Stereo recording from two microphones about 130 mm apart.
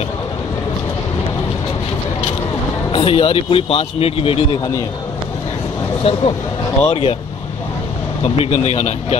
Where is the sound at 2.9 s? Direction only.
45° left (ahead or behind).